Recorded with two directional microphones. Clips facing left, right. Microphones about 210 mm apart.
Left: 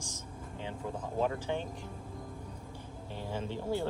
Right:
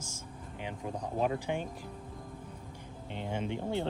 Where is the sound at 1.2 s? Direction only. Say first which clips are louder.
Right 1 dB; 15° right (ahead or behind).